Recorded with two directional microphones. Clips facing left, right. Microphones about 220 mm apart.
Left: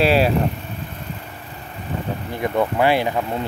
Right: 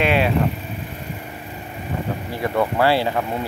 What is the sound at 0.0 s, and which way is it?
Speech, 35° left (ahead or behind).